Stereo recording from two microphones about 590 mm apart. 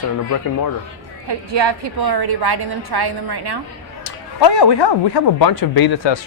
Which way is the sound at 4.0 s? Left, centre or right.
Left.